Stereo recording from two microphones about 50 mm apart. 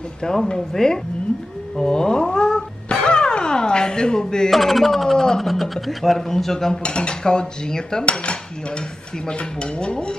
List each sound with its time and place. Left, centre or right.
0.2 s speech: centre
1.8 s cat: centre
4.5 s a sound: centre
5.5 s speech: centre
6.8 s cutlery: centre